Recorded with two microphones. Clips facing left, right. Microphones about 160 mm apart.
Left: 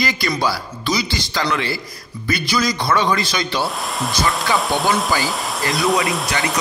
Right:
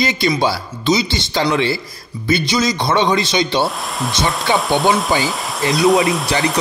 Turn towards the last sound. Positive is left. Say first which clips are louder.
# right 5 dB
turn(degrees=0)  # may be behind; listen again after turning